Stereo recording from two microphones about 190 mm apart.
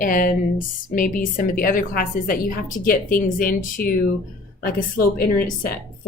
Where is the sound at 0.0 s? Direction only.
45° left (ahead or behind).